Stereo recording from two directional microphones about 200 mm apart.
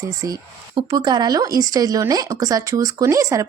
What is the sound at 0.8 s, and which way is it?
Speech, 20° right (ahead or behind).